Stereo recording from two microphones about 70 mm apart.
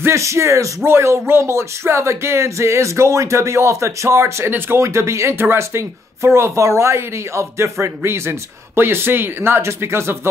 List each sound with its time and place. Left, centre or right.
0.0 s speech: right